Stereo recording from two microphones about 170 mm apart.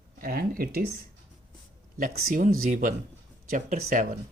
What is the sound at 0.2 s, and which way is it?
Speech, 60° right (ahead or behind).